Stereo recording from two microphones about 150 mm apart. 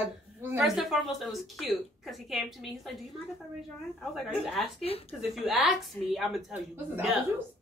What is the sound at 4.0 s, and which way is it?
Speech, centre (ahead or behind).